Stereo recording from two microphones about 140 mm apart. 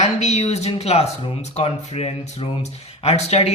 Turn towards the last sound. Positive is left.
turn(degrees=45)  # may be behind; listen again after turning